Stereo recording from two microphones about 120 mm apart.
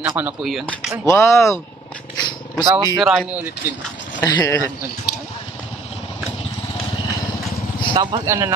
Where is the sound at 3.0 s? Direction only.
Centre (ahead or behind).